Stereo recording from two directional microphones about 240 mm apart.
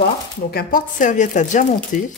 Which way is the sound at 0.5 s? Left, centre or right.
Left.